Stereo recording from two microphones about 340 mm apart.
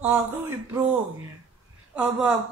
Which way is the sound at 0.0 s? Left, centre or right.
Centre.